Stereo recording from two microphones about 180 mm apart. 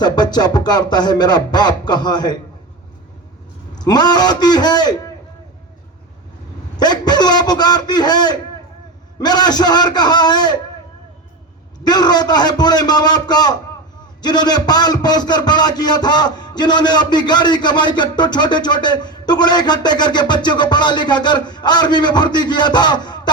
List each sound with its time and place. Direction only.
0.0 s a man's voice: 25° left (ahead or behind)
3.8 s a man's voice: 25° left (ahead or behind)
6.7 s a man's voice: 25° left (ahead or behind)
11.8 s a man's voice: 20° left (ahead or behind)